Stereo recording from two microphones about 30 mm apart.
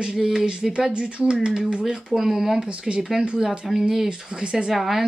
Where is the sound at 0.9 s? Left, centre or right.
Right.